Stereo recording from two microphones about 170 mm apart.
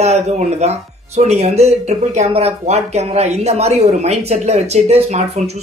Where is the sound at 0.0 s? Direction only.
40° right (ahead or behind).